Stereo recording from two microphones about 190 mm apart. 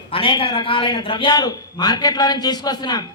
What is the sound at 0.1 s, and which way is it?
A man's voice, 25° left (ahead or behind).